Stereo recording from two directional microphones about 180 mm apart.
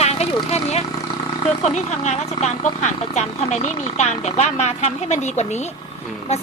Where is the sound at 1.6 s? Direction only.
40° left (ahead or behind).